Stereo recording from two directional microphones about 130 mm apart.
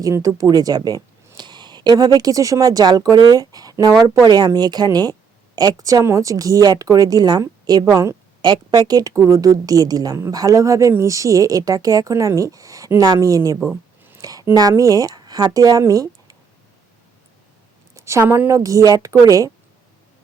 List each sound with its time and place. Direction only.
0.0 s a woman's voice: 25° right (ahead or behind)
17.9 s a woman's voice: 20° right (ahead or behind)